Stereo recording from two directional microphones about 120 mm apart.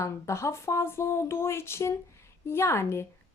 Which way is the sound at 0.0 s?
25° left (ahead or behind).